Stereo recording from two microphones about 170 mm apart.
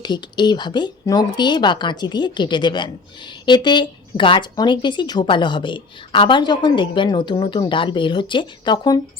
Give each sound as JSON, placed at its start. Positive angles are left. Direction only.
{"t": 0.0, "sound": "speech", "side_deg": 25}